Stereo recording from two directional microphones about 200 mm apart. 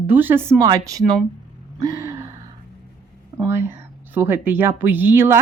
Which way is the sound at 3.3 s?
10° right (ahead or behind).